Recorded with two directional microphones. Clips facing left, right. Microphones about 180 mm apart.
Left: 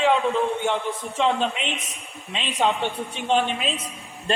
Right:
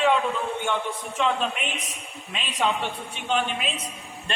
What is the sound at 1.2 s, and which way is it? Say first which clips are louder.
A woman's voice: left 3 dB; 30° left (ahead or behind).